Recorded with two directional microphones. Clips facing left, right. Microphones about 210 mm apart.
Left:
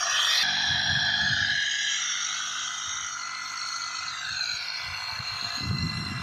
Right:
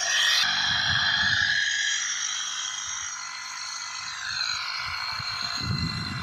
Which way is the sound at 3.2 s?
75° left (ahead or behind).